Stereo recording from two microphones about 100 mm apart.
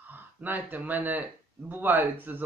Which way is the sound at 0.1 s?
15° right (ahead or behind).